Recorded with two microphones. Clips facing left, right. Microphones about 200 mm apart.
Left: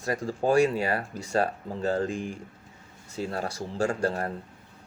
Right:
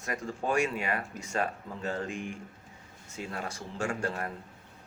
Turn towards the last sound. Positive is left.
turn(degrees=35)  # may be behind; listen again after turning